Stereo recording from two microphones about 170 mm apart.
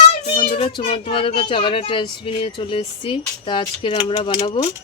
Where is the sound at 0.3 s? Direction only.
35° left (ahead or behind).